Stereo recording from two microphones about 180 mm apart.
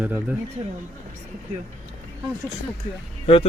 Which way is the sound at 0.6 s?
40° right (ahead or behind).